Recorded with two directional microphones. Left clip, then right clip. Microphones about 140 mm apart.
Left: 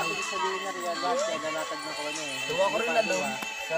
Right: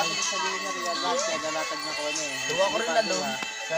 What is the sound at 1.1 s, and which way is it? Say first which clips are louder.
Speech: right 1 dB; 10° left (ahead or behind).